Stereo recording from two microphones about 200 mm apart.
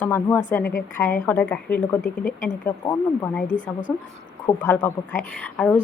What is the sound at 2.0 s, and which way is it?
Speech, 40° left (ahead or behind).